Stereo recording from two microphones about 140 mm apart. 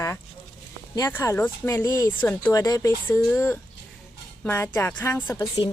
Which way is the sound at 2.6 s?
25° left (ahead or behind).